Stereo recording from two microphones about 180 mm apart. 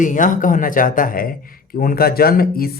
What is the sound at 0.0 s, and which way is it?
Speech, 45° left (ahead or behind).